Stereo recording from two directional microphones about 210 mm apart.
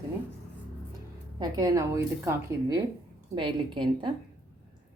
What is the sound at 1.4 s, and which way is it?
A woman's voice, 20° right (ahead or behind).